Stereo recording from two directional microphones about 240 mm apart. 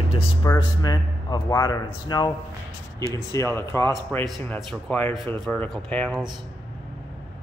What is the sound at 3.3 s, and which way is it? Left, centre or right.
A man's voice, centre.